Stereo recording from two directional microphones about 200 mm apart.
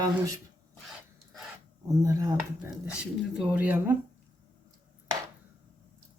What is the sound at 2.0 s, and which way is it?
Speech, 15° right (ahead or behind).